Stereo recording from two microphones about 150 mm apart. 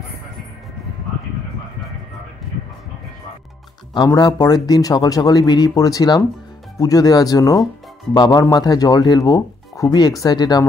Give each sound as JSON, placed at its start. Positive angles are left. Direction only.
{"t": 3.9, "sound": "speech", "side_deg": 25}